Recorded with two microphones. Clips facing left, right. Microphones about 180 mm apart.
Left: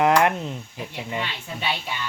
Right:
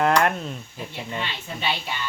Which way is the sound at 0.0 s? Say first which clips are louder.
Left 2 dB; 15° left (ahead or behind).